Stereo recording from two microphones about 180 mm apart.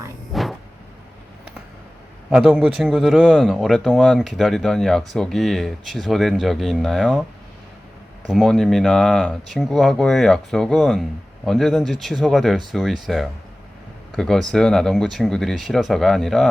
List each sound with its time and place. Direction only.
0.3 s vehicle: centre (ahead or behind)
2.3 s speech: 5° right (ahead or behind)
8.3 s speech: centre (ahead or behind)